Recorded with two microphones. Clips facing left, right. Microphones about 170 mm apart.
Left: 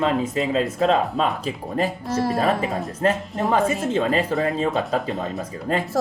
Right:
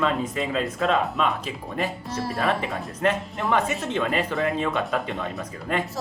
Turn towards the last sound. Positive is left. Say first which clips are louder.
# left 4 dB
turn(degrees=35)  # may be behind; listen again after turning